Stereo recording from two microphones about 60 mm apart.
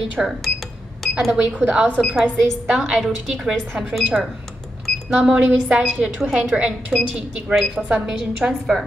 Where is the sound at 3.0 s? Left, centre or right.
Centre.